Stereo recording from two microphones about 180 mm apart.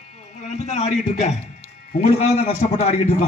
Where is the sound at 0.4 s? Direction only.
40° left (ahead or behind).